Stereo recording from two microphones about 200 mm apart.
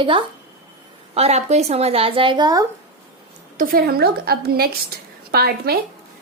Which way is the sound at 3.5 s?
45° right (ahead or behind).